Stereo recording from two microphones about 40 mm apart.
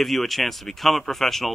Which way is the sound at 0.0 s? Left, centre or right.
Centre.